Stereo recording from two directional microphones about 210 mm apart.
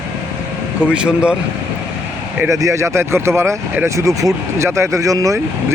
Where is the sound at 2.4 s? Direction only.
15° right (ahead or behind).